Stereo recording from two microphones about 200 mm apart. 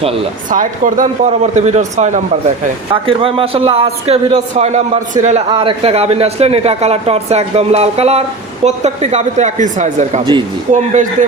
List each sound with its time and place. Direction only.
0.5 s a man's voice: 40° right (ahead or behind)